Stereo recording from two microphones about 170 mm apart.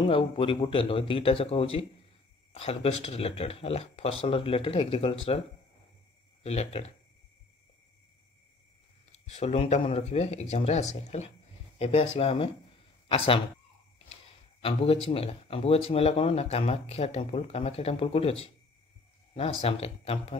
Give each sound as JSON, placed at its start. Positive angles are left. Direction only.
{"t": 0.1, "sound": "speech", "side_deg": 30}
{"t": 6.4, "sound": "speech", "side_deg": 35}
{"t": 9.2, "sound": "speech", "side_deg": 40}
{"t": 14.6, "sound": "speech", "side_deg": 35}